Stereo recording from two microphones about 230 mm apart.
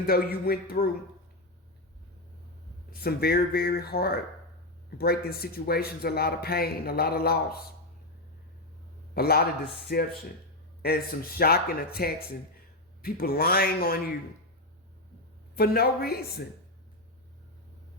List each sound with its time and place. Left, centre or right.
0.0 s a man's voice: left
2.9 s a man's voice: left
9.1 s a man's voice: left
11.3 s a man's voice: left
13.0 s a man's voice: left
15.5 s a man's voice: left